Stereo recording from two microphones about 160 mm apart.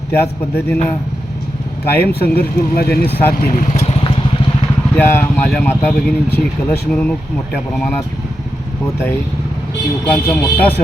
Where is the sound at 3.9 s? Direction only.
35° left (ahead or behind).